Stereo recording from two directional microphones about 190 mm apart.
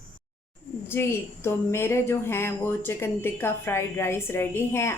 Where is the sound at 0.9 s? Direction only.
10° left (ahead or behind).